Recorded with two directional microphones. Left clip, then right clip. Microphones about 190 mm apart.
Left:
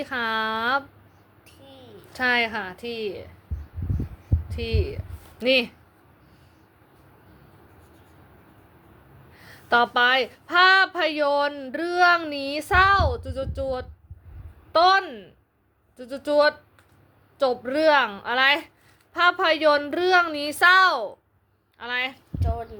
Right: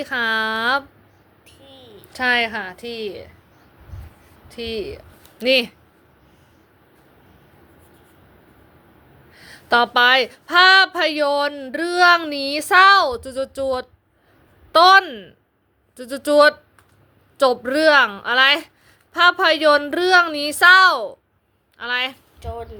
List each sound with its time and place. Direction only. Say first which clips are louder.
0.0 s a woman's voice: right 5 dB; 10° right (ahead or behind)
1.5 s a sound: right 3 dB; centre (ahead or behind)
2.1 s a woman's voice: right 4 dB; 10° right (ahead or behind)
4.4 s a woman's voice: right 3 dB; 10° right (ahead or behind)
9.3 s a woman's voice: right 4 dB; 15° right (ahead or behind)
22.4 s speech: left 1 dB; centre (ahead or behind)